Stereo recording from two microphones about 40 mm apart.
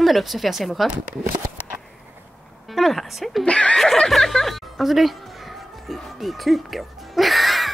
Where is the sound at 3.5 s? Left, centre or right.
Left.